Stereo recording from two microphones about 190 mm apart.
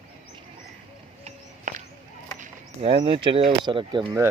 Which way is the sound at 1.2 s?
45° right (ahead or behind).